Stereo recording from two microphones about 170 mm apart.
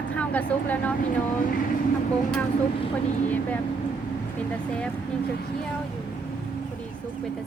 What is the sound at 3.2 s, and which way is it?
A woman's voice, 10° left (ahead or behind).